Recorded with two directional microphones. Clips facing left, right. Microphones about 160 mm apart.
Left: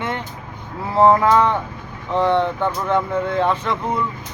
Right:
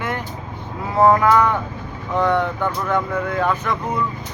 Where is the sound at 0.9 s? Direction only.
25° left (ahead or behind).